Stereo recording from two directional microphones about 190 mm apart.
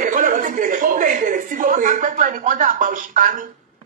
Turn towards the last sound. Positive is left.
turn(degrees=-45)  # may be behind; listen again after turning